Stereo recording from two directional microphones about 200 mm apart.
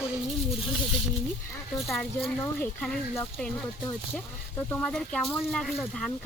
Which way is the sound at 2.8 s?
5° left (ahead or behind).